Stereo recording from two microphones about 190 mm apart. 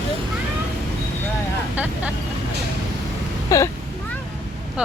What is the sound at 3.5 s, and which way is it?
Speech, 20° left (ahead or behind).